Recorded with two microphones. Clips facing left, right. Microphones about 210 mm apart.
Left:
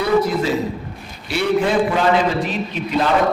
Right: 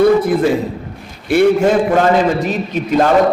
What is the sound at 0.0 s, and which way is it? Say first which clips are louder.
A man's voice: right 6 dB; 50° right (ahead or behind).